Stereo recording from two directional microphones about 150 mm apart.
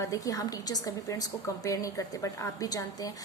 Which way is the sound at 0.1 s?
25° left (ahead or behind).